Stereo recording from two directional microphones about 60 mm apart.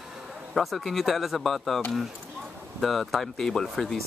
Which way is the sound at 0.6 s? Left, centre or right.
Centre.